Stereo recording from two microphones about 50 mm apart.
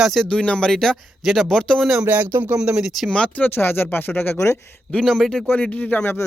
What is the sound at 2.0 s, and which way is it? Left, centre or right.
Speech, right.